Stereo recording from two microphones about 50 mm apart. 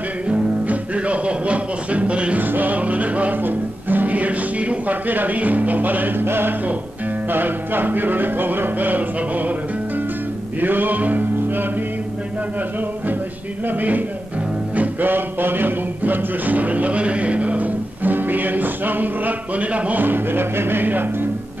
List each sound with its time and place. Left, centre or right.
0.3 s music: right
2.4 s music: right
10.6 s music: right
13.7 s music: right